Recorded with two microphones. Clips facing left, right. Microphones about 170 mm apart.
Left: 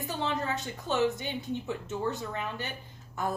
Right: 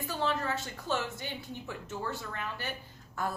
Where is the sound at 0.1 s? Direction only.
20° left (ahead or behind).